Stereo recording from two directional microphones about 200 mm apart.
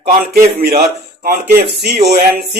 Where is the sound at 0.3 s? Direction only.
45° right (ahead or behind).